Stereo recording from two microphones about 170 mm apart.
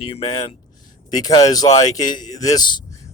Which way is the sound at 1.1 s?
20° left (ahead or behind).